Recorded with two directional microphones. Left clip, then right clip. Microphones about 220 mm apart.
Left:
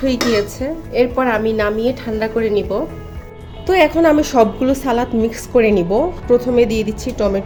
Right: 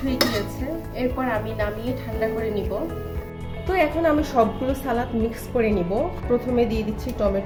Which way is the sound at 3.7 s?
40° left (ahead or behind).